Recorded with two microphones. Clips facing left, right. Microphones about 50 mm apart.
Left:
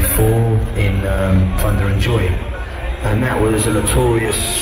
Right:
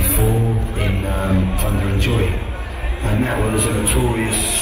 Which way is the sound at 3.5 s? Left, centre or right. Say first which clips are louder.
Left 3 dB; left.